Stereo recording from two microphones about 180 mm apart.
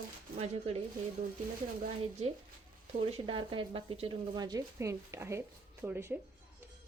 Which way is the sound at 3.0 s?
30° right (ahead or behind).